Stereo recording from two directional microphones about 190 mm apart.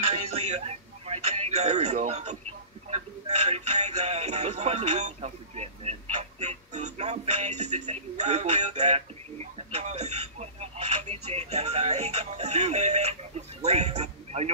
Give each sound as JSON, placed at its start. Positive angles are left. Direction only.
{"t": 0.3, "sound": "a man's voice", "side_deg": -35}